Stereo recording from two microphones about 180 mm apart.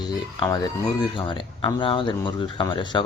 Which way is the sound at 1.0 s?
25° left (ahead or behind).